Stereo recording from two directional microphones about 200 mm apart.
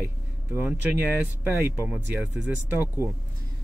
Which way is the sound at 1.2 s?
10° right (ahead or behind).